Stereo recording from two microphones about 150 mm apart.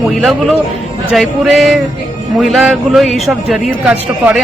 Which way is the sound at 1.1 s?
Centre (ahead or behind).